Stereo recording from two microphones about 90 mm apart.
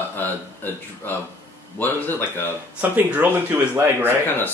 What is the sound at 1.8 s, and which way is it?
Speech, 25° left (ahead or behind).